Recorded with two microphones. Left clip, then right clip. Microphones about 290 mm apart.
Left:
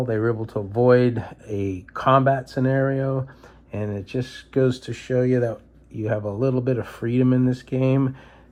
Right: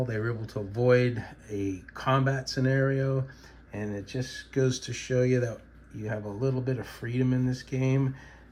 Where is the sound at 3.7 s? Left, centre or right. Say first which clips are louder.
Left 6 dB; left.